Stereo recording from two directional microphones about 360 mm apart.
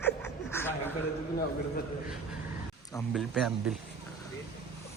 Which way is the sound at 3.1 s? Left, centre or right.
Centre.